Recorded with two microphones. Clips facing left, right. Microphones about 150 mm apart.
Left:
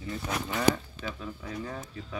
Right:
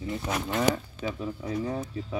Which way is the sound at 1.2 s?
25° right (ahead or behind).